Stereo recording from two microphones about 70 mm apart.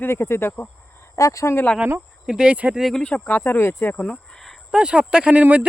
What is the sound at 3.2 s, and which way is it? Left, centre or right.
Speech, left.